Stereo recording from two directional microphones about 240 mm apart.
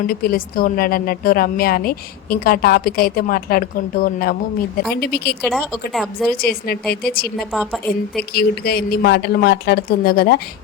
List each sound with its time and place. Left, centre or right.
0.1 s a woman's voice: left
5.5 s a woman's voice: centre
6.3 s a woman's voice: left
7.5 s a woman's voice: centre
8.3 s a woman's voice: left